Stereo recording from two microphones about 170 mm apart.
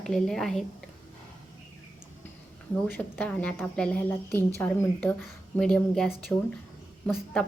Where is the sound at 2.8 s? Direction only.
10° left (ahead or behind).